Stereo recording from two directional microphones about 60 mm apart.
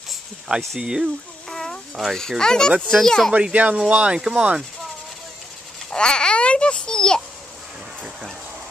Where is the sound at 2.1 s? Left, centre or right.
Centre.